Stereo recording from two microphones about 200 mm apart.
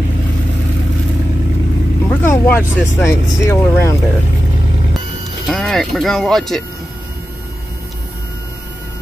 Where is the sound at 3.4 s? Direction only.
15° left (ahead or behind).